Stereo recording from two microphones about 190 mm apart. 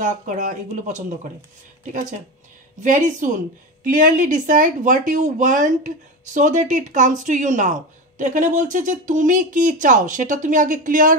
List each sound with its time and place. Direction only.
0.0 s speech: 40° right (ahead or behind)